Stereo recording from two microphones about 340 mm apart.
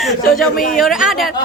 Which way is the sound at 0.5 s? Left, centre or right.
Left.